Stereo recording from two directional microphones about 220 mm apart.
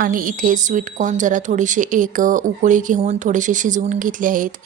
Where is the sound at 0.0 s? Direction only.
40° right (ahead or behind).